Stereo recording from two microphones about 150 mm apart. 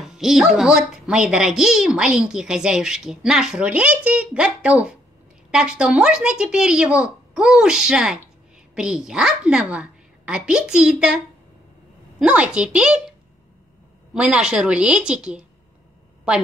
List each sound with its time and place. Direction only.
0.1 s a woman's voice: centre (ahead or behind)
12.2 s a woman's voice: 5° right (ahead or behind)
14.1 s a woman's voice: 5° right (ahead or behind)